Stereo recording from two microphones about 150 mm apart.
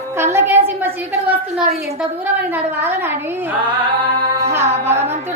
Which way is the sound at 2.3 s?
10° right (ahead or behind).